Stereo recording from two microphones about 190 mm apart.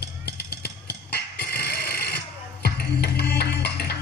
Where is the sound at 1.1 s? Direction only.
55° left (ahead or behind).